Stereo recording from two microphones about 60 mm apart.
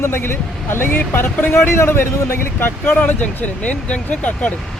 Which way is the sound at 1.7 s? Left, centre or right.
Left.